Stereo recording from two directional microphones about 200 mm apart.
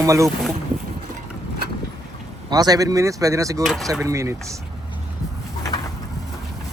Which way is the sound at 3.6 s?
Centre (ahead or behind).